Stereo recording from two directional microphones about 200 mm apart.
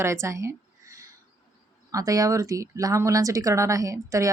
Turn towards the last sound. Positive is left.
turn(degrees=-15)  # may be behind; listen again after turning